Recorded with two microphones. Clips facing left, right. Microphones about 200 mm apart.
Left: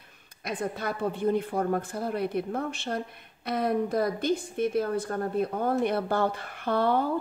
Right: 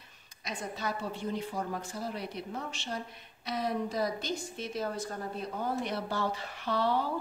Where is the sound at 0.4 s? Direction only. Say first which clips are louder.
Left 6 dB; 55° left (ahead or behind).